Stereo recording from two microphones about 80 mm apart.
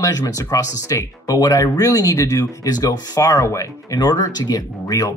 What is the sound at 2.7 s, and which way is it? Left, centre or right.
Speech, left.